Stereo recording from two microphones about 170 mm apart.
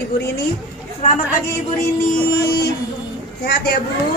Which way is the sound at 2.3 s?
80° left.